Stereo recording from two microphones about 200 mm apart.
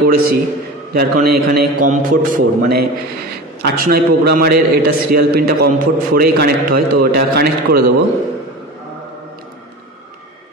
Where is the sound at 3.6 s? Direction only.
50° right (ahead or behind).